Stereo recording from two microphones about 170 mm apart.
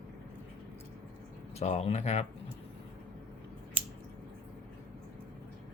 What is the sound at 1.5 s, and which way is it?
Speech, 40° left (ahead or behind).